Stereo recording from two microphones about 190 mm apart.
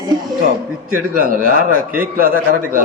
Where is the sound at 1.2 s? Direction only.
50° right (ahead or behind).